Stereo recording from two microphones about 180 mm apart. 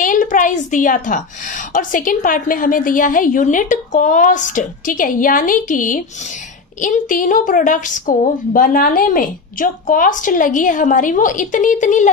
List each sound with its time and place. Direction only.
0.0 s a woman's voice: 45° left (ahead or behind)